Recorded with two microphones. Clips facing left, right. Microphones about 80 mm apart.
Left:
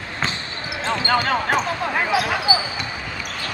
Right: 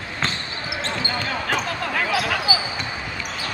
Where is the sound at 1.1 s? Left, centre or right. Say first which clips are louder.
Left 7 dB; left.